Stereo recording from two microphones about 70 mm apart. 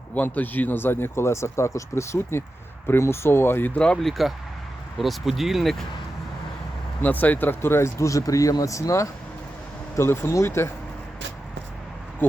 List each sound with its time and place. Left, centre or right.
0.1 s speech: left
3.8 s speech: centre
7.0 s speech: left
10.0 s speech: left